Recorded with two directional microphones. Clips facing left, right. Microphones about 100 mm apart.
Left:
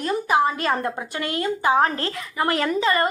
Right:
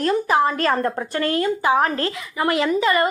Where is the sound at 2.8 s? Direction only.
30° left (ahead or behind).